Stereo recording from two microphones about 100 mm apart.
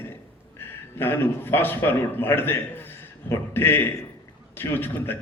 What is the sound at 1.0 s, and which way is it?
A man's voice, 20° left (ahead or behind).